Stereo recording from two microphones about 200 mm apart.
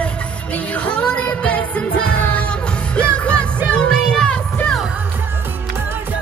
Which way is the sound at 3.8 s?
5° left (ahead or behind).